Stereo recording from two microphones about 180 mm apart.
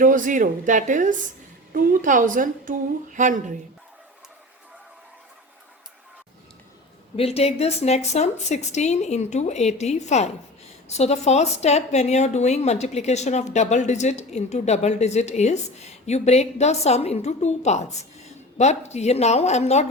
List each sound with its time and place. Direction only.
0.0 s a woman's voice: 50° right (ahead or behind)
7.2 s a woman's voice: 35° left (ahead or behind)